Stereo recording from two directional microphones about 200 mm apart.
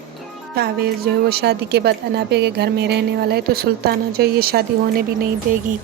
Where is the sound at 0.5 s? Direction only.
50° right (ahead or behind).